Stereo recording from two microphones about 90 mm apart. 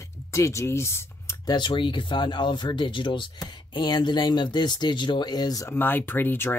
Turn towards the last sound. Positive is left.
turn(degrees=25)  # may be behind; listen again after turning